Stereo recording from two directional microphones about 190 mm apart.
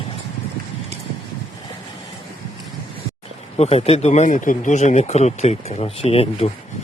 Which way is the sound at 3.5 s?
35° left (ahead or behind).